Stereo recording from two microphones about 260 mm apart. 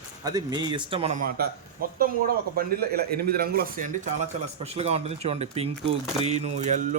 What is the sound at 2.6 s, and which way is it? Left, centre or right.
A man's voice, right.